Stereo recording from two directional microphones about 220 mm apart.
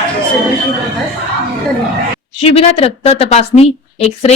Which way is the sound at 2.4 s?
25° left (ahead or behind).